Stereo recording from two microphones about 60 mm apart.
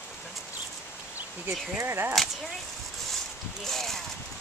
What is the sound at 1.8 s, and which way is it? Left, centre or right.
Speech, right.